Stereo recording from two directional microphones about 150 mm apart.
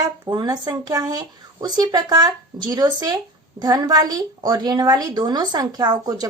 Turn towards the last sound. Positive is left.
turn(degrees=-25)  # may be behind; listen again after turning